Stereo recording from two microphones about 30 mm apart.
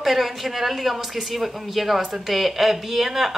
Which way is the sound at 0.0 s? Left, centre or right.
Centre.